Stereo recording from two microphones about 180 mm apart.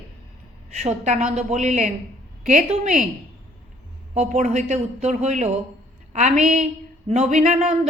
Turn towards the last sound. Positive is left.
turn(degrees=-40)  # may be behind; listen again after turning